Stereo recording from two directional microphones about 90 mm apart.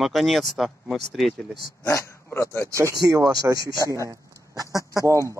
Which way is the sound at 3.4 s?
40° right (ahead or behind).